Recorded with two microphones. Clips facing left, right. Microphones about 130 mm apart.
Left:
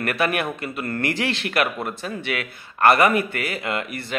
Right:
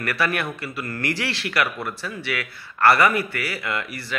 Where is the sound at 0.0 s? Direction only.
20° left (ahead or behind).